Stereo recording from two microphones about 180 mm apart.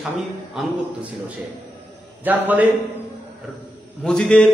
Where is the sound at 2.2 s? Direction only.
10° right (ahead or behind).